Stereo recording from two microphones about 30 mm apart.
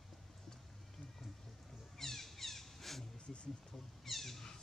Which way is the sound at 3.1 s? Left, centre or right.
Left.